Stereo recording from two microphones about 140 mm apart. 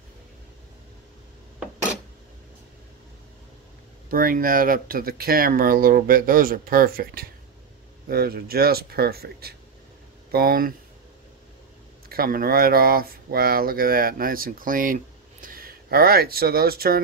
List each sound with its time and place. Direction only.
4.1 s speech: 90° right
12.1 s speech: 90° right
15.4 s speech: 90° right